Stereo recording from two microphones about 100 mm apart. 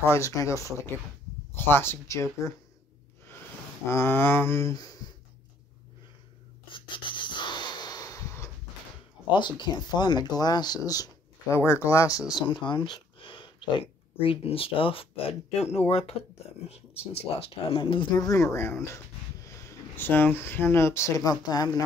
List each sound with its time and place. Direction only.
0.0 s speech: 30° left (ahead or behind)
3.9 s speech: 25° left (ahead or behind)
6.7 s gasp: 55° left (ahead or behind); by 8.5 s 30° left (ahead or behind)
9.3 s speech: 50° left (ahead or behind); by 12.2 s 35° left (ahead or behind)
12.4 s speech: 50° left (ahead or behind)
18.1 s speech: 35° left (ahead or behind)
20.0 s speech: 20° left (ahead or behind); by 21.8 s 40° left (ahead or behind)